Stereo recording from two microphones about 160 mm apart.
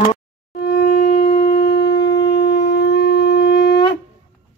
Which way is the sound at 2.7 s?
90° left.